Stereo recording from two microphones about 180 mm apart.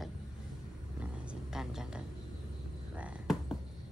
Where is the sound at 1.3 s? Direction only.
5° right (ahead or behind).